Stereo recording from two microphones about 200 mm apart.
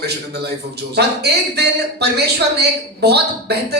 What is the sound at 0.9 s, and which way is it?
A man's voice, 55° right (ahead or behind).